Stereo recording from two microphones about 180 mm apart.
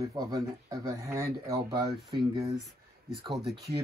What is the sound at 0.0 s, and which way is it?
Speech, 20° right (ahead or behind).